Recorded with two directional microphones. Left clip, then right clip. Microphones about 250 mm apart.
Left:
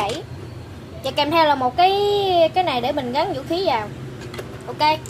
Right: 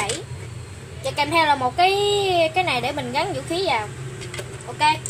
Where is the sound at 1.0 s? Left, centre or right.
Centre.